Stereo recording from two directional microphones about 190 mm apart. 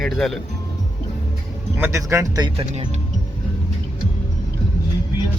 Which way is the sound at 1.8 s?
15° right (ahead or behind).